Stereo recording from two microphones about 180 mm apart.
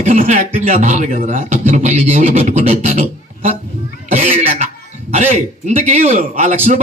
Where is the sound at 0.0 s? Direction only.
45° right (ahead or behind).